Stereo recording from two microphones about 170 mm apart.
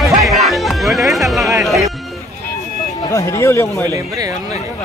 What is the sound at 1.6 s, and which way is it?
Music, centre (ahead or behind).